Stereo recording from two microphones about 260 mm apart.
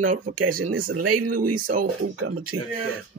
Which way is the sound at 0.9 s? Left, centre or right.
Right.